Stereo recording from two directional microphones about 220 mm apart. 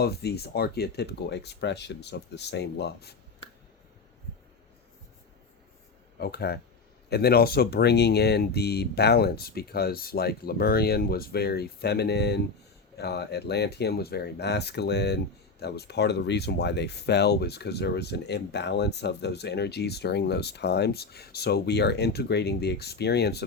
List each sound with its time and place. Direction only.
0.0 s speech: 45° left (ahead or behind)
6.1 s speech: 45° left (ahead or behind)